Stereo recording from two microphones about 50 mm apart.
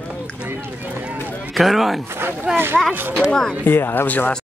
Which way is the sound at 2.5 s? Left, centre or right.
Right.